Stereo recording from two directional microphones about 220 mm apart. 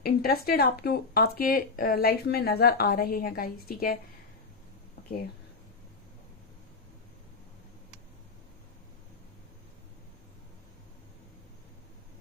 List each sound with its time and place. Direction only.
0.0 s speech: 40° left (ahead or behind)